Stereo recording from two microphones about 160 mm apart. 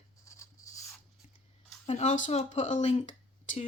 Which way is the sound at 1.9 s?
45° left (ahead or behind).